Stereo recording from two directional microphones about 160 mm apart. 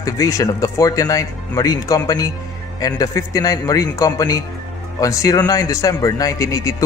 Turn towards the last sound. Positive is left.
turn(degrees=20)  # may be behind; listen again after turning